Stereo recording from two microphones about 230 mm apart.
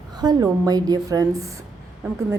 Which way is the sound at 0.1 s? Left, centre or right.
Centre.